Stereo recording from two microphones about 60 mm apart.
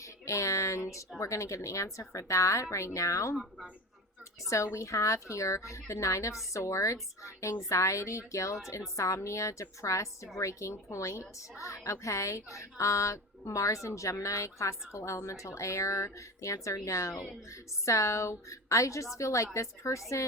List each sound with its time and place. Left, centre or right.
0.0 s a sound: left
1.2 s a woman's voice: left
4.4 s a woman's voice: left